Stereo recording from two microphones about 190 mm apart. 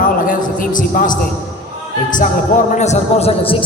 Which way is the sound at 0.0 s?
45° left (ahead or behind).